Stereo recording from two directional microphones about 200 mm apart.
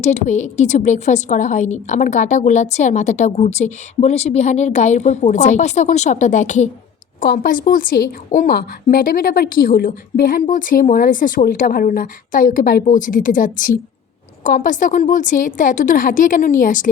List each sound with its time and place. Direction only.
0.0 s a woman's voice: 35° left (ahead or behind)